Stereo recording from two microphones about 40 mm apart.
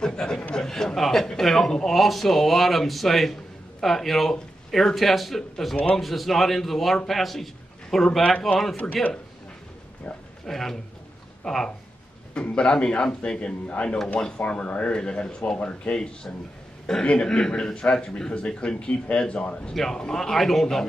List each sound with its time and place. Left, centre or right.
0.0 s a man's voice: centre
0.7 s a man's voice: centre
1.9 s speech: centre
8.3 s a man's voice: centre
8.7 s speech: left
10.4 s a man's voice: centre
12.6 s a man's voice: left
19.7 s a man's voice: centre